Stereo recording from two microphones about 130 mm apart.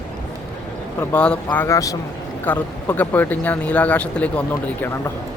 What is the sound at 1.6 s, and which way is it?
Speech, 25° left (ahead or behind).